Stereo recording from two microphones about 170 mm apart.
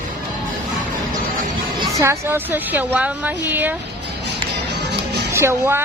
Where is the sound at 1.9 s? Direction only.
15° right (ahead or behind).